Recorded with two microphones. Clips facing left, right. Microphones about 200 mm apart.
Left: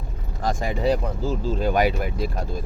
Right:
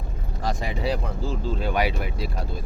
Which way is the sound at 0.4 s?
45° left (ahead or behind).